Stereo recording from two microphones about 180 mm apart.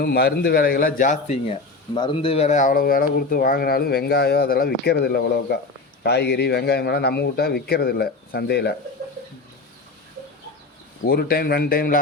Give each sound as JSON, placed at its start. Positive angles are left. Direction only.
{"t": 0.0, "sound": "speech", "side_deg": 65}
{"t": 2.0, "sound": "speech", "side_deg": 30}
{"t": 11.0, "sound": "speech", "side_deg": 55}